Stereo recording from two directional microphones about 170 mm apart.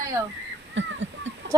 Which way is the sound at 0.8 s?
90° right.